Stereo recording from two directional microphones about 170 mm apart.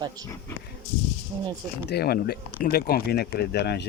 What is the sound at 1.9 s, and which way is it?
Speech, 65° left (ahead or behind).